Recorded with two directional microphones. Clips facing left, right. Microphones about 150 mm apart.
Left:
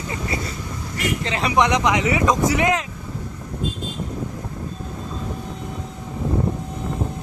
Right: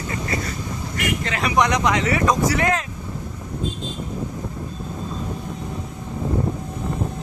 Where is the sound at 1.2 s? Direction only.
25° left (ahead or behind).